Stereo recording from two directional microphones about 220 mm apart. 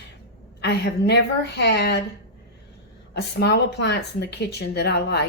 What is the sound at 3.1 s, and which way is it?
Speech, 50° left (ahead or behind).